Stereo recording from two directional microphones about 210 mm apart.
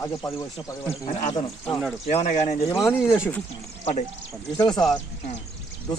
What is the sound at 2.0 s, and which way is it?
Speech, 35° left (ahead or behind).